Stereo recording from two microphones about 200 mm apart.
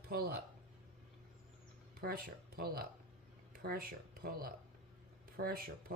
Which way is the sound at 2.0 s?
50° right (ahead or behind).